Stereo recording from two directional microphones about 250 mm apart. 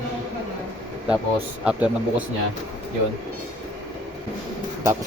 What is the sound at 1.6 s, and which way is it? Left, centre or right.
Speech, centre.